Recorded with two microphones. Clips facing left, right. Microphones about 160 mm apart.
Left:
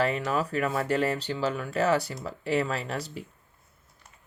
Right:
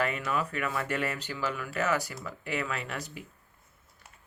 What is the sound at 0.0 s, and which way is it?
Speech, 35° left (ahead or behind).